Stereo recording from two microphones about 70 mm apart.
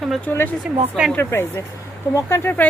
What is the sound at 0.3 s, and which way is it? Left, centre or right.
Speech, left.